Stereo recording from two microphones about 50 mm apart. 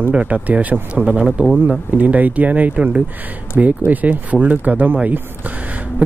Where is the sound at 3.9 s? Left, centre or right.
Right.